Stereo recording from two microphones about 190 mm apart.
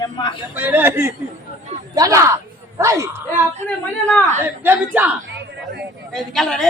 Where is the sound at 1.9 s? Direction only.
20° right (ahead or behind).